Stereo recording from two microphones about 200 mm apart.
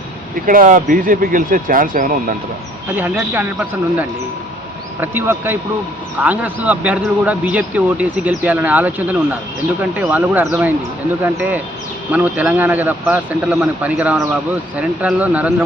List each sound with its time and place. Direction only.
0.4 s speech: 40° right (ahead or behind)
2.9 s a man's voice: 10° right (ahead or behind)